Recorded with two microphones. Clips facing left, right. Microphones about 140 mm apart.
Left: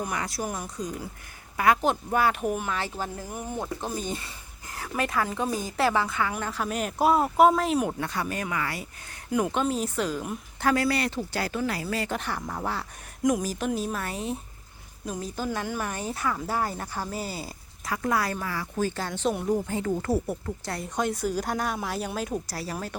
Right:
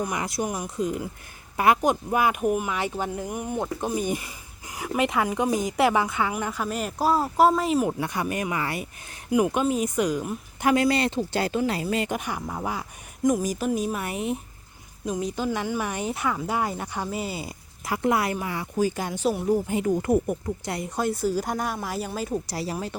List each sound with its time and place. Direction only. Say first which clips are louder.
0.1 s speech: right 3 dB; 15° right (ahead or behind)
0.4 s speech: right 3 dB; centre (ahead or behind)
0.8 s speech: right 6 dB; 25° right (ahead or behind); by 8.0 s 5° right (ahead or behind)
8.0 s speech: right 3 dB; 15° right (ahead or behind)
9.3 s speech: right 3 dB; 10° right (ahead or behind)
14.0 s speech: right 3 dB; 20° right (ahead or behind)
15.4 s speech: right 3 dB; 15° right (ahead or behind)
22.7 s speech: even; 15° right (ahead or behind)